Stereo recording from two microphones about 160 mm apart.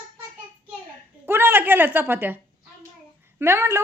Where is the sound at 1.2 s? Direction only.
15° right (ahead or behind).